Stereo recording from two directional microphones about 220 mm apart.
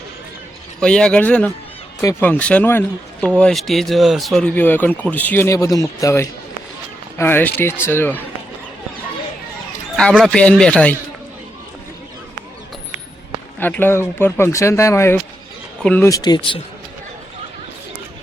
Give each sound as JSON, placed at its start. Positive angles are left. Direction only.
{"t": 0.8, "sound": "speech", "side_deg": 5}
{"t": 9.9, "sound": "speech", "side_deg": 5}
{"t": 13.6, "sound": "speech", "side_deg": 10}